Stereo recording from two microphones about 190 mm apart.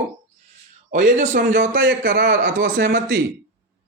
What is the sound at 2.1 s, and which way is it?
Speech, 70° right (ahead or behind).